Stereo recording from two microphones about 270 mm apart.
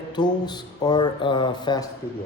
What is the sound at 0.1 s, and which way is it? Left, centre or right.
Speech, centre.